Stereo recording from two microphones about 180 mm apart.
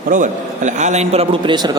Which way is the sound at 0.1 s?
45° right (ahead or behind).